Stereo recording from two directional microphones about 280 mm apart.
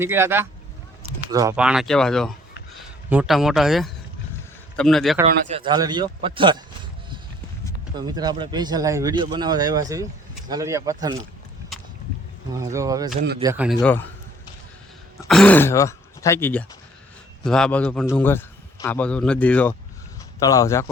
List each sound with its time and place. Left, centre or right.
0.0 s a man's voice: centre
5.3 s speech: right
7.9 s speech: centre
12.5 s speech: centre
13.7 s speech: centre
15.3 s a man's voice: centre